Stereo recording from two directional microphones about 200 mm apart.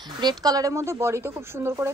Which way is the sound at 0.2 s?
20° right (ahead or behind).